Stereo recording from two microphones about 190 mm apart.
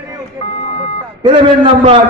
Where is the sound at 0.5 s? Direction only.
30° left (ahead or behind).